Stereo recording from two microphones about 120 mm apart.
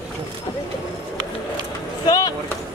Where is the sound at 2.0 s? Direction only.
35° left (ahead or behind).